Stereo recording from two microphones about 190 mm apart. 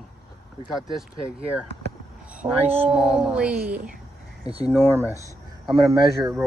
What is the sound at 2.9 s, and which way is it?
Speech, 5° right (ahead or behind).